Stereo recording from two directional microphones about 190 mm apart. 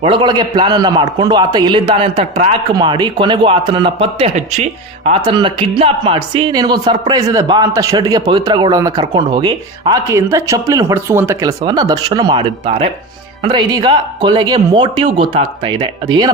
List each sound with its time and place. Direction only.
0.0 s speech: 25° right (ahead or behind)